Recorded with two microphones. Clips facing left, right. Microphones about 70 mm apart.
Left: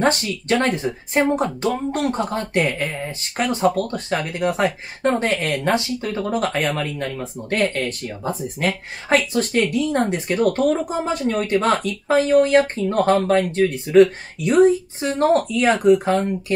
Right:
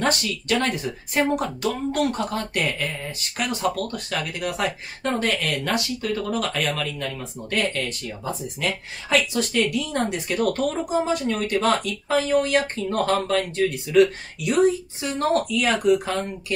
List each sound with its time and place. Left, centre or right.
0.0 s speech: left